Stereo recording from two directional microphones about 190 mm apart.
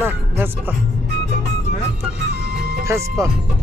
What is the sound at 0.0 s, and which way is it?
Speech, 10° right (ahead or behind).